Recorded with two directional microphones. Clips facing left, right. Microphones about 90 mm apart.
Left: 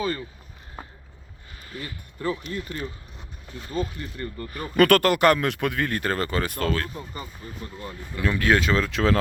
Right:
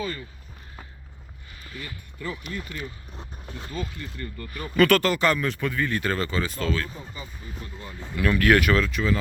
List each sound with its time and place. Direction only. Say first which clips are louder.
1.6 s speech: left 2 dB; 45° left (ahead or behind); by 6.0 s 65° left (ahead or behind)
6.0 s speech: left 1 dB; 45° left (ahead or behind)
8.1 s speech: right 2 dB; 20° left (ahead or behind)
8.9 s speech: left 3 dB; 90° left